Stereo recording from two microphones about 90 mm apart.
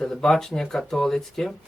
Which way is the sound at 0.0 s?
5° left (ahead or behind).